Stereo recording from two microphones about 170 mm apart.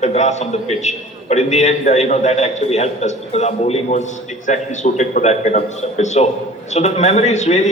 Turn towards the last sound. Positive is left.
turn(degrees=40)  # may be behind; listen again after turning